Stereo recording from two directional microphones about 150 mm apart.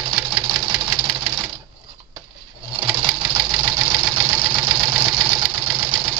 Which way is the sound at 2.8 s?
30° right (ahead or behind).